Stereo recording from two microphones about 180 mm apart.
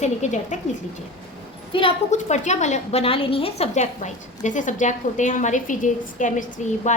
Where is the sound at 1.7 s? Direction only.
30° left (ahead or behind).